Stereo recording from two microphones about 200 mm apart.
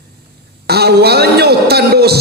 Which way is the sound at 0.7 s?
55° right (ahead or behind).